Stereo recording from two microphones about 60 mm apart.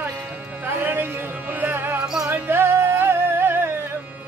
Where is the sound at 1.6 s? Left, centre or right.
Right.